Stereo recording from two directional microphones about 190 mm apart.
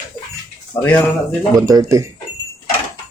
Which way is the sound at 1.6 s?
20° right (ahead or behind).